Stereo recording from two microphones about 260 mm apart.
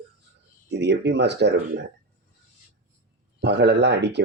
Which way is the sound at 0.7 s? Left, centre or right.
Right.